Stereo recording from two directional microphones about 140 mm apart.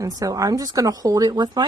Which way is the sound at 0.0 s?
25° right (ahead or behind).